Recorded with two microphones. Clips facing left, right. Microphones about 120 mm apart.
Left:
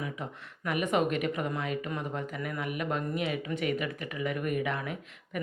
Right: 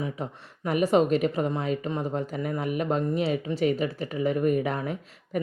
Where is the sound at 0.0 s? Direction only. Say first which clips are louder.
Right 5 dB; 35° right (ahead or behind).